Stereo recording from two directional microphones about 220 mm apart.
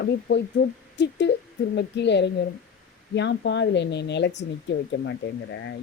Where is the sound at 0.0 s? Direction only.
55° left (ahead or behind).